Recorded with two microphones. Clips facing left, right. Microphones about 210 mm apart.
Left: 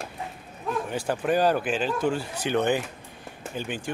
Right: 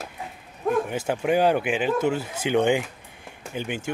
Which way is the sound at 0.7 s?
50° right (ahead or behind).